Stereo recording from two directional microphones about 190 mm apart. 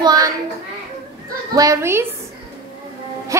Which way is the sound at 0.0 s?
20° right (ahead or behind).